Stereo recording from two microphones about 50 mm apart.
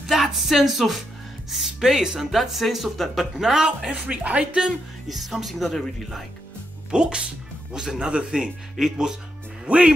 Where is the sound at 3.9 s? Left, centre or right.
Right.